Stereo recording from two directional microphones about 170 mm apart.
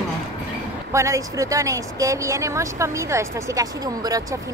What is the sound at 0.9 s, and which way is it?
Speech, 20° right (ahead or behind).